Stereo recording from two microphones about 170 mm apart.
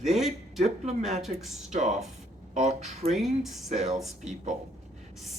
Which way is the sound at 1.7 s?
45° right (ahead or behind).